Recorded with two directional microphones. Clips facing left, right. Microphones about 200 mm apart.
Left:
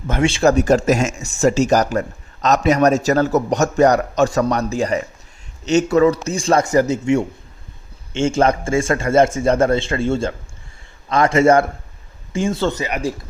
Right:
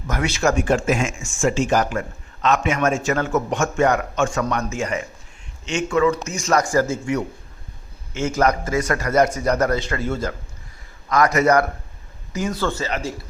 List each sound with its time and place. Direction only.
0.1 s a man's voice: 30° left (ahead or behind)